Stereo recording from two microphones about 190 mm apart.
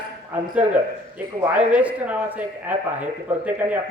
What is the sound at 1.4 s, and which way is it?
Speech, 5° right (ahead or behind).